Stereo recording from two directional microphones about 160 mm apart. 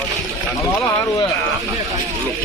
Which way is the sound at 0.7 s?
20° left (ahead or behind).